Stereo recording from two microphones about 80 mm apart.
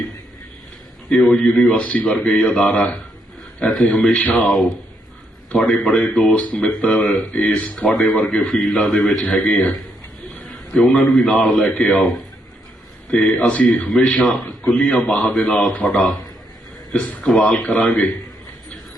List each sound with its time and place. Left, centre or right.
1.1 s speech: centre
4.4 s a man's voice: centre
10.4 s a man's voice: centre